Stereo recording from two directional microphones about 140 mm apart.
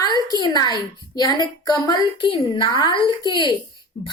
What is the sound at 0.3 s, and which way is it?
A woman's voice, 30° left (ahead or behind).